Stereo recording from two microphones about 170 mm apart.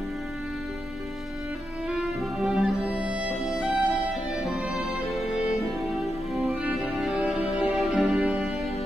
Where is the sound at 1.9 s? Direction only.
5° right (ahead or behind).